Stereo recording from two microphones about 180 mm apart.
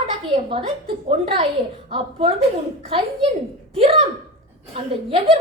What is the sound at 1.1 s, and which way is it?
A woman's voice, 30° right (ahead or behind).